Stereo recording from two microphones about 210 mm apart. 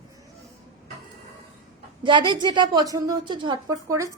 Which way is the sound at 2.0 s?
20° right (ahead or behind).